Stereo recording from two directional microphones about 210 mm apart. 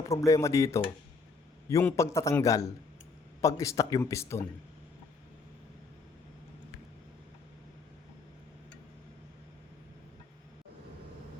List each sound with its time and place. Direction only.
0.0 s speech: 15° left (ahead or behind)